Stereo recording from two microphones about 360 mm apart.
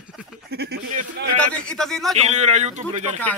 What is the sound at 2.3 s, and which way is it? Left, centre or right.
Speech, centre.